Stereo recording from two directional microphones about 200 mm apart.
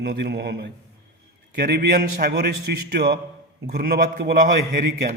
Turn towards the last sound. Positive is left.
turn(degrees=-50)  # may be behind; listen again after turning